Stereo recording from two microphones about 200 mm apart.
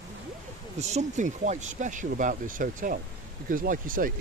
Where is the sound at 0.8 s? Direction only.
35° right (ahead or behind).